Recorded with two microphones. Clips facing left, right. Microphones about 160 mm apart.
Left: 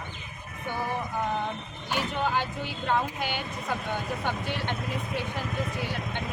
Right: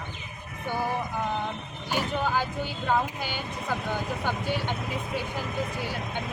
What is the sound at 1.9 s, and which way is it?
A woman's voice, 5° right (ahead or behind).